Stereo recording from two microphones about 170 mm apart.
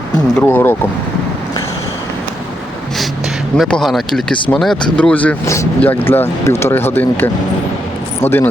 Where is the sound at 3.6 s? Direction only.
5° left (ahead or behind).